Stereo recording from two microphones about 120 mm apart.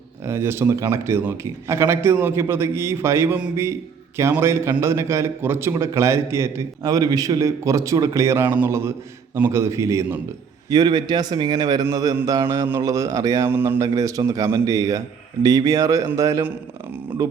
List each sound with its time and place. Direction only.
0.3 s a man's voice: 20° right (ahead or behind)
10.7 s a man's voice: 35° right (ahead or behind)